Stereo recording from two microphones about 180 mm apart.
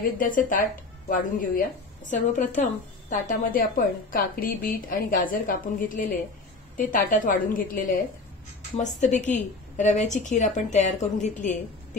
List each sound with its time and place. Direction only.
0.0 s a woman's voice: 50° left (ahead or behind)